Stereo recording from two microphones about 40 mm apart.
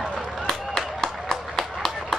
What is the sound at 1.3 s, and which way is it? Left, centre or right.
Clapping, centre.